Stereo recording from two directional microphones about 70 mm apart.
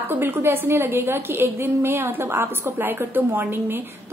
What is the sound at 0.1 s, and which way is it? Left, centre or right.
A woman's voice, right.